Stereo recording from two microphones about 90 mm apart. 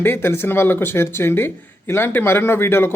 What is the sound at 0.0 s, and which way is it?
Speech, 25° left (ahead or behind).